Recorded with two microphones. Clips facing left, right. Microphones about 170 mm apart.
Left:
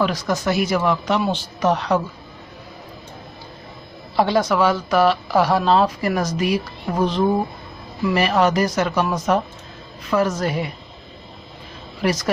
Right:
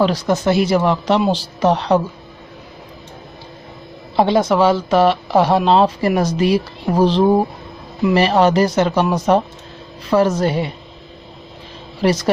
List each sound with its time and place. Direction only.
0.0 s speech: 30° right (ahead or behind)
4.2 s speech: 25° right (ahead or behind)
12.0 s speech: 30° right (ahead or behind)